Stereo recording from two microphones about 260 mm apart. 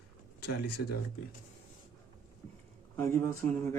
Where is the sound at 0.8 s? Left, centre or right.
Left.